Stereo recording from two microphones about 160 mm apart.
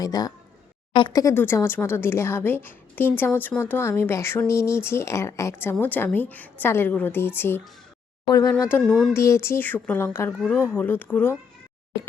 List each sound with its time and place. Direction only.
0.0 s speech: 25° left (ahead or behind)
8.9 s speech: 5° left (ahead or behind)
9.1 s speech: 15° left (ahead or behind)